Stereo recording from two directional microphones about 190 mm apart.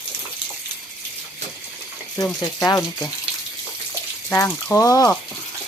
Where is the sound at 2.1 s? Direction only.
20° left (ahead or behind).